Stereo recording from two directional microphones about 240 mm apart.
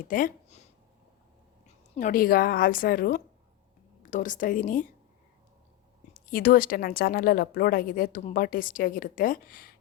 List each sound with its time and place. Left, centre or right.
0.1 s a woman's voice: left
1.6 s a woman's voice: left
6.3 s a woman's voice: left